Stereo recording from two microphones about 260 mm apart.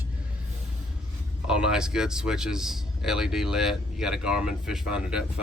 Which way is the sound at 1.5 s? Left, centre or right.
Centre.